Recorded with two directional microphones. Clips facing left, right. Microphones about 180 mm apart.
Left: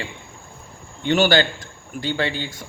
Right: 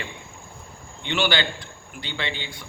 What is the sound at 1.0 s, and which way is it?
A man's voice, 45° left (ahead or behind).